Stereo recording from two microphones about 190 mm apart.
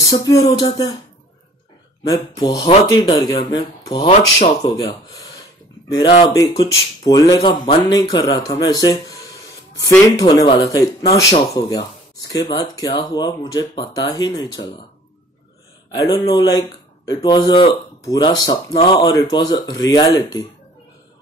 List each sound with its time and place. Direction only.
0.0 s speech: 20° left (ahead or behind)
2.0 s speech: 20° left (ahead or behind)
4.6 s a sound: 20° left (ahead or behind)
5.9 s speech: 20° left (ahead or behind)
15.9 s speech: 20° left (ahead or behind)